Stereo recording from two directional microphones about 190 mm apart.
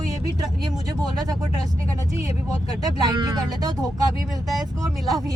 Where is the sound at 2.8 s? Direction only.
20° right (ahead or behind).